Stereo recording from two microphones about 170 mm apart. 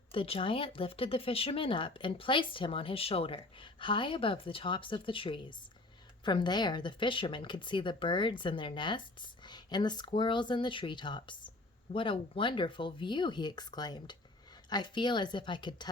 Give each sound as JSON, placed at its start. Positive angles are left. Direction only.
{"t": 0.1, "sound": "speech", "side_deg": 30}